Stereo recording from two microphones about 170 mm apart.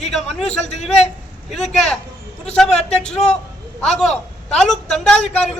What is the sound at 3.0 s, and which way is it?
Speech, 40° left (ahead or behind).